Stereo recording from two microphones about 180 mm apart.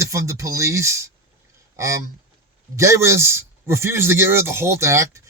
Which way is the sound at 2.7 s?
15° right (ahead or behind).